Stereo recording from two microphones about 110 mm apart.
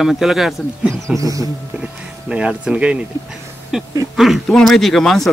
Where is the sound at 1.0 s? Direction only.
30° right (ahead or behind).